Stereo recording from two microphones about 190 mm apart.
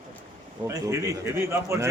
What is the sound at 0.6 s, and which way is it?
A man's voice, 15° right (ahead or behind).